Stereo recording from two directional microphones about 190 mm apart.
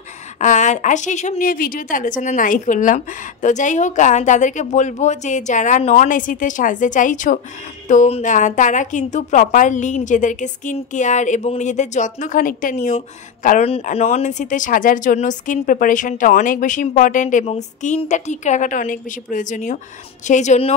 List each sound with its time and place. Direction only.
0.4 s a woman's voice: 40° left (ahead or behind)